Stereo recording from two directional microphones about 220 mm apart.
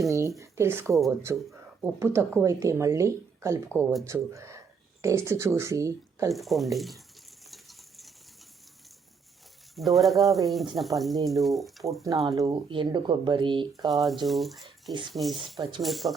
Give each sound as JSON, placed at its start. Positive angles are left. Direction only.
{"t": 0.1, "sound": "speech", "side_deg": -15}
{"t": 3.7, "sound": "speech", "side_deg": 5}
{"t": 4.0, "sound": "speech", "side_deg": -15}
{"t": 6.3, "sound": "speech", "side_deg": 0}
{"t": 7.5, "sound": "a sound", "side_deg": 0}
{"t": 9.7, "sound": "speech", "side_deg": 0}
{"t": 12.3, "sound": "speech", "side_deg": -15}
{"t": 13.9, "sound": "speech", "side_deg": 0}
{"t": 15.5, "sound": "speech", "side_deg": -15}
{"t": 15.8, "sound": "speech", "side_deg": 0}